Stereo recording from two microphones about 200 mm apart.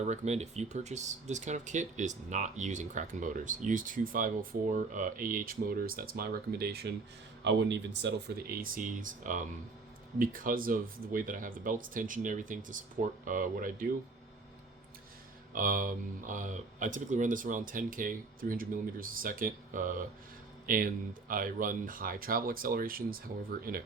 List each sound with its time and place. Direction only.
0.0 s speech: 35° right (ahead or behind); by 6.9 s 50° right (ahead or behind)
7.4 s speech: 65° right (ahead or behind); by 13.8 s 45° right (ahead or behind)
15.5 s speech: 45° right (ahead or behind)